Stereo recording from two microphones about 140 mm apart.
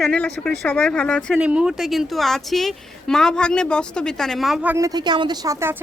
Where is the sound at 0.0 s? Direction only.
5° left (ahead or behind).